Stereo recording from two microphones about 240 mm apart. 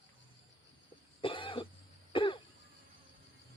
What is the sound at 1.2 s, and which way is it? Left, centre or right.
Cough, left.